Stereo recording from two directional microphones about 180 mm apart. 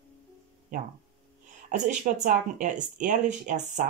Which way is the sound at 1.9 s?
45° right (ahead or behind).